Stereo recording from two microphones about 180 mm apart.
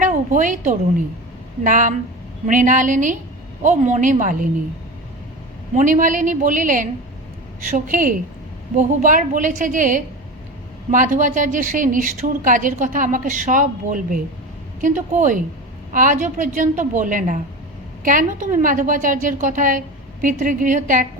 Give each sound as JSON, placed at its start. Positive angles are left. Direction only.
{"t": 0.0, "sound": "a woman's voice", "side_deg": -45}
{"t": 5.7, "sound": "a woman's voice", "side_deg": -45}